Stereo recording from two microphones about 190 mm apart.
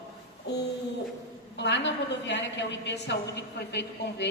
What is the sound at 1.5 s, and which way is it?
A woman's voice, 70° left (ahead or behind).